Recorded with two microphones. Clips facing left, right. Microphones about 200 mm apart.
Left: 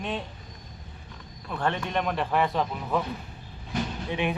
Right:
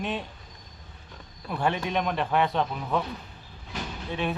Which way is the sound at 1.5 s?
10° right (ahead or behind).